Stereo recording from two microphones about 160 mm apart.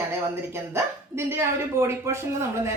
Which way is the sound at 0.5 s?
15° right (ahead or behind).